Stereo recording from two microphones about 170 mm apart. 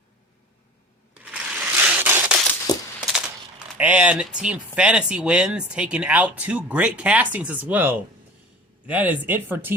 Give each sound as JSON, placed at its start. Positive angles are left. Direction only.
{"t": 1.2, "sound": "crushing", "side_deg": -10}
{"t": 2.7, "sound": "a sound", "side_deg": 25}
{"t": 3.8, "sound": "speech", "side_deg": -10}